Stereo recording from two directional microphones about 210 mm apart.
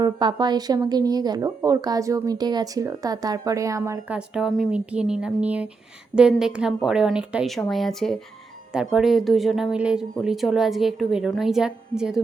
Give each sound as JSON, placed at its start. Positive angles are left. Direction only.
{"t": 0.0, "sound": "speech", "side_deg": -20}
{"t": 4.4, "sound": "speech", "side_deg": 0}